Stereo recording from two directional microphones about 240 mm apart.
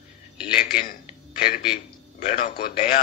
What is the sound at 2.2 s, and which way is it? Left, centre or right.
Speech, left.